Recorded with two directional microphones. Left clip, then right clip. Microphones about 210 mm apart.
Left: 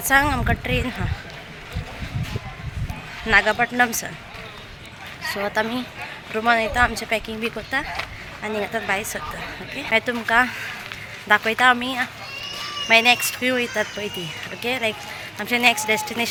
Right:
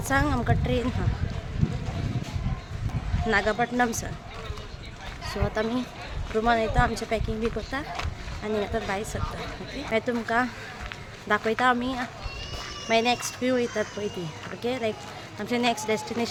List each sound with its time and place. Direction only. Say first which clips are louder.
0.0 s speech: left 7 dB; 5° right (ahead or behind)
3.2 s speech: left 7 dB; 5° right (ahead or behind)
5.3 s speech: left 5 dB; 5° right (ahead or behind)